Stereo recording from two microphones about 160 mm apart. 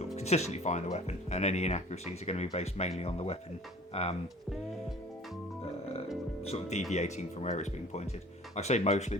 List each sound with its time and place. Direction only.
0.2 s speech: 45° left (ahead or behind)
6.4 s speech: 40° left (ahead or behind)